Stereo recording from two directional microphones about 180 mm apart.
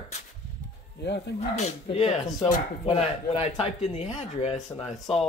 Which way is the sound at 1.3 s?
35° left (ahead or behind).